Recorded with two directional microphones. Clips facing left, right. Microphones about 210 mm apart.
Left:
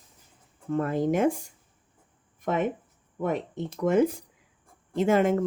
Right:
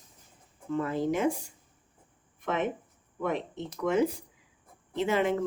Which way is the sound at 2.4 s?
45° left (ahead or behind).